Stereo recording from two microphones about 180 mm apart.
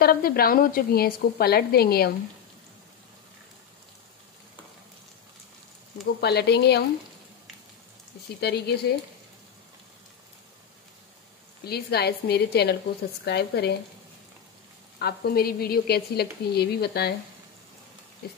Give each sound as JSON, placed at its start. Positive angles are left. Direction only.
{"t": 0.0, "sound": "a woman's voice", "side_deg": 55}
{"t": 6.2, "sound": "speech", "side_deg": 65}
{"t": 8.4, "sound": "a woman's voice", "side_deg": 65}
{"t": 11.6, "sound": "a woman's voice", "side_deg": 60}
{"t": 15.0, "sound": "a woman's voice", "side_deg": 60}